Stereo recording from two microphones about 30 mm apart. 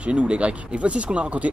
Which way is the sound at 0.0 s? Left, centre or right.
Right.